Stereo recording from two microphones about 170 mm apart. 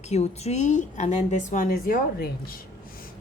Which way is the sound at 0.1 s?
40° left (ahead or behind).